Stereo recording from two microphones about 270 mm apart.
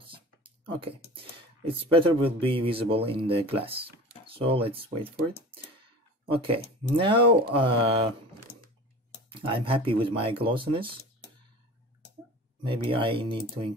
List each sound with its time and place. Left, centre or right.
0.1 s a sound: centre
1.7 s speech: centre
6.3 s speech: centre
9.3 s speech: centre
12.6 s speech: centre